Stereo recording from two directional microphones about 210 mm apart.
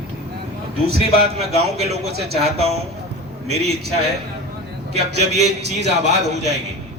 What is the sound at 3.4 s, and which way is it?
Speech, 30° right (ahead or behind).